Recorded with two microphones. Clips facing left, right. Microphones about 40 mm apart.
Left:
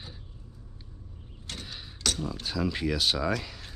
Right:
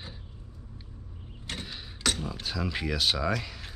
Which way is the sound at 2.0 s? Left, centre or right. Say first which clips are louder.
Right 1 dB; centre.